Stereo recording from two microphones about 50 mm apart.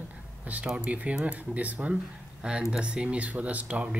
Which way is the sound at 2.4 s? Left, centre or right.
Centre.